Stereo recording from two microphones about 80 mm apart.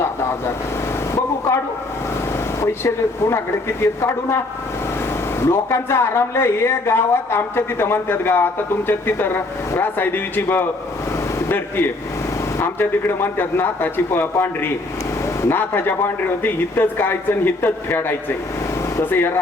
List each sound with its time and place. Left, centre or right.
2.6 s a woman's voice: left
5.4 s a woman's voice: left